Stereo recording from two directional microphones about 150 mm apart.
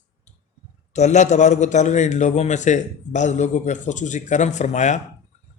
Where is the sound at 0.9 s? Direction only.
50° left (ahead or behind).